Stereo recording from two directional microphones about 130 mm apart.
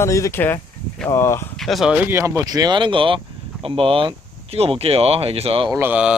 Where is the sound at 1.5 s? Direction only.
Centre (ahead or behind).